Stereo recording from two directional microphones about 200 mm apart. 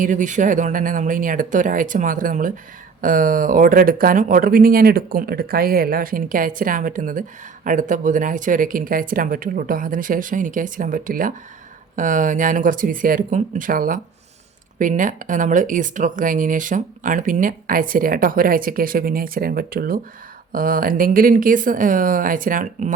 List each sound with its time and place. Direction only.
0.0 s speech: 40° right (ahead or behind)